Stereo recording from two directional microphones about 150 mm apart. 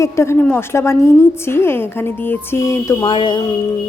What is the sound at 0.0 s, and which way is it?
A woman's voice, 20° left (ahead or behind).